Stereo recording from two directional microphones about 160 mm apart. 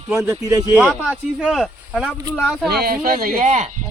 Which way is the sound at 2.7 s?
70° right (ahead or behind).